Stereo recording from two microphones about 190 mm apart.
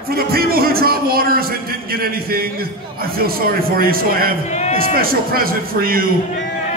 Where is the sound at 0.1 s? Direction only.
50° right (ahead or behind).